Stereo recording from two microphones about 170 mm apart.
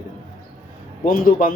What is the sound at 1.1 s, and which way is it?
Speech, 55° left (ahead or behind).